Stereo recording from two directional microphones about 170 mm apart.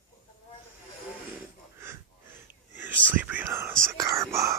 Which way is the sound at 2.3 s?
10° right (ahead or behind).